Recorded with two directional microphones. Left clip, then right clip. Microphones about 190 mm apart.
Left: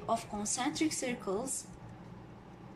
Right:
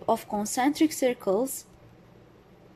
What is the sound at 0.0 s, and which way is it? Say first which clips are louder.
A woman's voice: right 8 dB; 50° right (ahead or behind).